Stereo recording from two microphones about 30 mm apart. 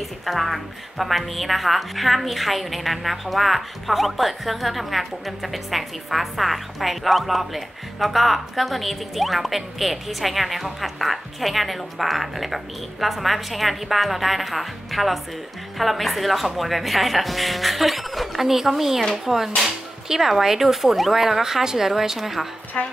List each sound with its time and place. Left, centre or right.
0.2 s a woman's voice: centre
22.8 s a woman's voice: left